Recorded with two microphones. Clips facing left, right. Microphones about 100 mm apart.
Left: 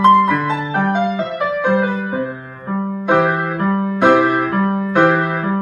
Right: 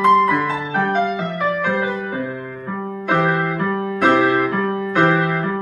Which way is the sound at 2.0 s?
15° left (ahead or behind).